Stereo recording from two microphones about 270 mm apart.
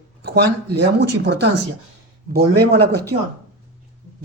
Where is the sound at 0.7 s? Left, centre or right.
Right.